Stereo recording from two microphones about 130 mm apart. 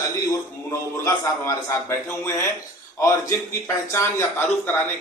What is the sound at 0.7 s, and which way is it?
A man's voice, 25° left (ahead or behind).